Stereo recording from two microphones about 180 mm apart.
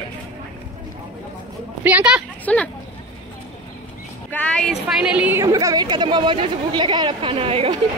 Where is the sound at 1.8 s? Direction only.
5° right (ahead or behind).